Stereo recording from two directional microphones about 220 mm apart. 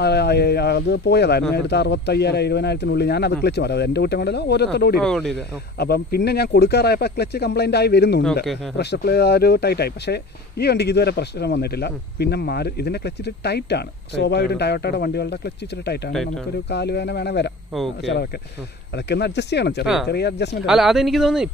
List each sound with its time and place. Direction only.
0.0 s speech: 50° left (ahead or behind)
19.8 s speech: centre (ahead or behind)
20.1 s speech: 50° left (ahead or behind)
20.6 s speech: centre (ahead or behind)